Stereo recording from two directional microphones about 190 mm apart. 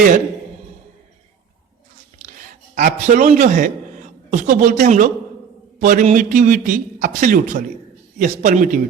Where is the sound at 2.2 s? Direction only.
45° right (ahead or behind).